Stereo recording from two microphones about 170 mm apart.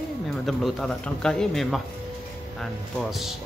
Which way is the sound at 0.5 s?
Centre (ahead or behind).